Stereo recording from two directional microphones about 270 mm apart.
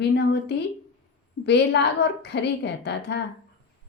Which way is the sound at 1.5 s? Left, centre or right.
Left.